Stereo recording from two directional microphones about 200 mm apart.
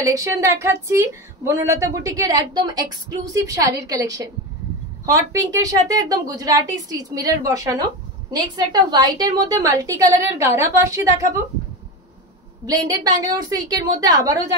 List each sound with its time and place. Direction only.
0.0 s a woman's voice: 15° right (ahead or behind)
12.6 s a woman's voice: 15° right (ahead or behind)